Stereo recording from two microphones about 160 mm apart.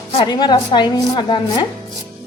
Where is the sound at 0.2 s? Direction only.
25° left (ahead or behind).